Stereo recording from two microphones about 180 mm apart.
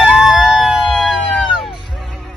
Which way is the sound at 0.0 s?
5° right (ahead or behind).